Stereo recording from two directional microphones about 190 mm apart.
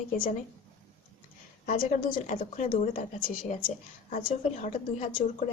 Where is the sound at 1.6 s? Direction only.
50° left (ahead or behind).